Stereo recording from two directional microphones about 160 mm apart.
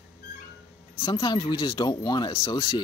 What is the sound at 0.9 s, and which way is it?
Speech, 30° left (ahead or behind).